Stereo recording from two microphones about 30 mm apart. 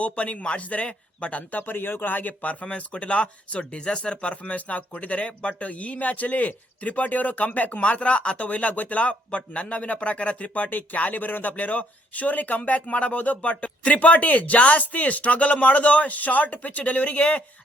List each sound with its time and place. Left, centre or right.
0.0 s speech: left
1.5 s speech: left
2.6 s speech: left
7.8 s speech: left
8.4 s speech: left
12.9 s speech: left